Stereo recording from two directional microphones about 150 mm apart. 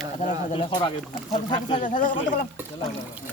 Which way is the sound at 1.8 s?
60° left (ahead or behind).